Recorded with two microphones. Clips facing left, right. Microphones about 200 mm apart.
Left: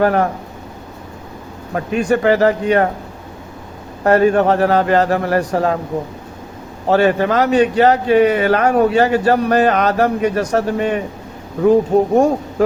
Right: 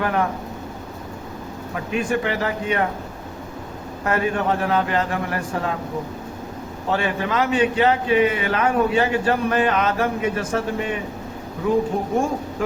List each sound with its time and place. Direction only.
0.0 s a man's voice: 40° left (ahead or behind)
1.7 s a man's voice: 40° left (ahead or behind)
4.0 s a man's voice: 40° left (ahead or behind)
6.9 s a man's voice: 40° left (ahead or behind)
12.1 s a man's voice: 40° left (ahead or behind)